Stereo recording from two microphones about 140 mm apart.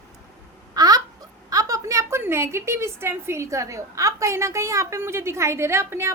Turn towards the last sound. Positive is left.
turn(degrees=-20)  # may be behind; listen again after turning